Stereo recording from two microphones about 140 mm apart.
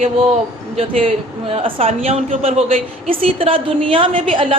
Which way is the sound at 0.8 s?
40° right (ahead or behind).